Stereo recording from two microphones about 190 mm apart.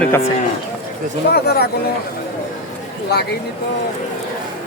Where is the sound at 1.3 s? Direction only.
55° left (ahead or behind).